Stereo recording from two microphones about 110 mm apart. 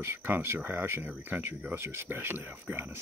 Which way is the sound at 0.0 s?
20° right (ahead or behind).